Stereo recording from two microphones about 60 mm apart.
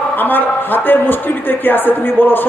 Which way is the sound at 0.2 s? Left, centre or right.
Left.